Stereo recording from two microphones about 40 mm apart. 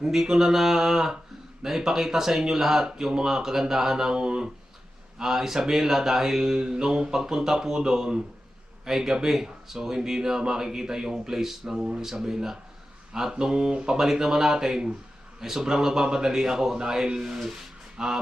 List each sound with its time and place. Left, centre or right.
0.0 s speech: centre
13.3 s mantra: right
14.0 s speech: centre